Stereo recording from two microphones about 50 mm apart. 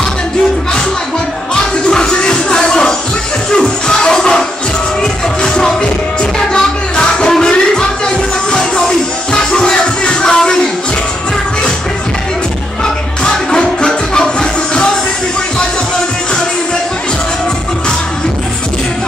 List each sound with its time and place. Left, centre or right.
1.5 s music: centre
13.2 s music: centre